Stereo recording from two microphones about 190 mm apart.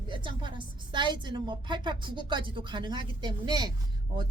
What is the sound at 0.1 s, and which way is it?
A woman's voice, 25° right (ahead or behind).